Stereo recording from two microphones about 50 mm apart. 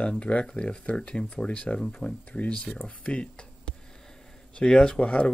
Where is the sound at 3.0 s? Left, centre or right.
Left.